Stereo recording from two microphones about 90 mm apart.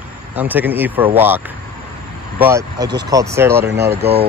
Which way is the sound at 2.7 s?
45° right (ahead or behind).